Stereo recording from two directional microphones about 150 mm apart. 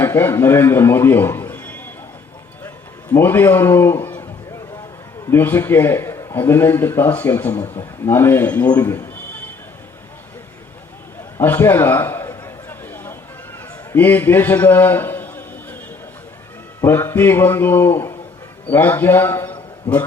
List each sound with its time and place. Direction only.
0.0 s a man's voice: 15° left (ahead or behind)
2.6 s a sound: 15° left (ahead or behind)
5.3 s a man's voice: 15° left (ahead or behind)
8.7 s speech: 20° left (ahead or behind)
11.3 s a sound: 15° left (ahead or behind)
13.9 s a man's voice: 15° left (ahead or behind)
16.8 s a man's voice: 15° left (ahead or behind)